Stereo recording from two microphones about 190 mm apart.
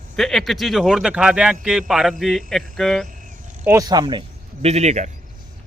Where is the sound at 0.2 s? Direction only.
Centre (ahead or behind).